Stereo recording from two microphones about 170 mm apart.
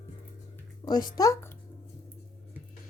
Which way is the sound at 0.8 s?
25° left (ahead or behind).